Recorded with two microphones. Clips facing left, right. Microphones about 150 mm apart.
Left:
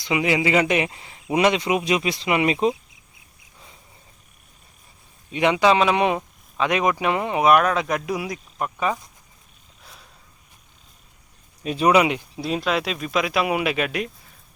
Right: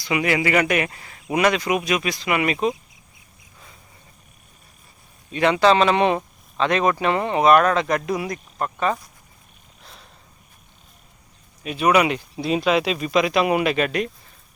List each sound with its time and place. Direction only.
0.0 s speech: 20° left (ahead or behind)
5.3 s speech: 15° left (ahead or behind)
11.6 s speech: 35° left (ahead or behind)
11.9 s speech: 15° left (ahead or behind)
12.4 s speech: centre (ahead or behind)